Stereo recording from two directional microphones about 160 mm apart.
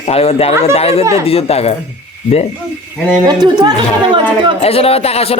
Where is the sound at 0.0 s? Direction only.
40° left (ahead or behind).